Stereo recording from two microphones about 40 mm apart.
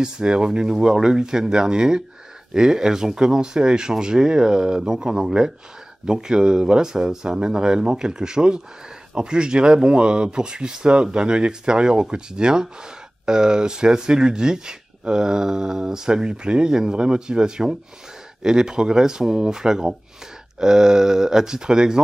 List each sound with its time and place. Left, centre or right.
0.0 s speech: centre